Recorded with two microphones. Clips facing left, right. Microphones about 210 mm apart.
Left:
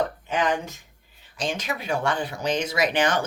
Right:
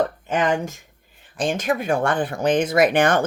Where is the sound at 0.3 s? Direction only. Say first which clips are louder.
Right 4 dB; 50° right (ahead or behind).